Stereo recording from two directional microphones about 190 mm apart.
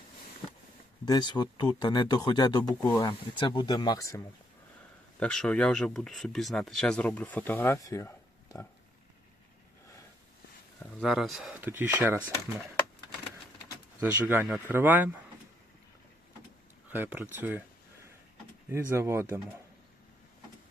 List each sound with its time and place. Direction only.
1.0 s speech: 20° left (ahead or behind)
5.2 s speech: 5° left (ahead or behind)
11.0 s speech: centre (ahead or behind)
14.0 s speech: 10° right (ahead or behind)
16.9 s speech: 10° right (ahead or behind)
18.7 s speech: 15° right (ahead or behind)